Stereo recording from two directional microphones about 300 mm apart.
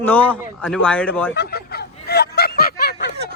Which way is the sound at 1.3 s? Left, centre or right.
Left.